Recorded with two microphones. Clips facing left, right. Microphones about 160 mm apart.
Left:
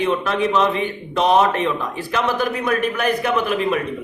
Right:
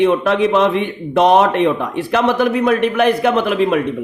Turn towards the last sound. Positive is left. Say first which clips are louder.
# right 5 dB
turn(degrees=-65)  # may be behind; listen again after turning